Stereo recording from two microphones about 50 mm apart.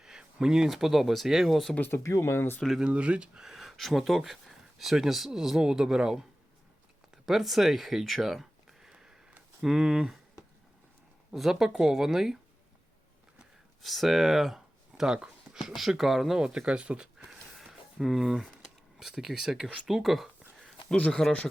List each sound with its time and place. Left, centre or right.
0.0 s speech: centre
2.0 s speech: left
2.9 s speech: right
3.5 s speech: centre
7.3 s speech: centre
11.3 s speech: centre
13.8 s speech: centre
15.5 s speech: centre
16.4 s speech: centre
17.2 s music: centre
18.0 s speech: centre
20.9 s speech: left